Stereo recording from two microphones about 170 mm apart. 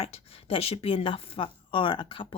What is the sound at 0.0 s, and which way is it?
Speech, 35° left (ahead or behind).